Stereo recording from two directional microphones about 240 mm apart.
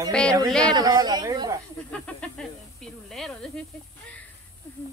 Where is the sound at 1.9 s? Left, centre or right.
Centre.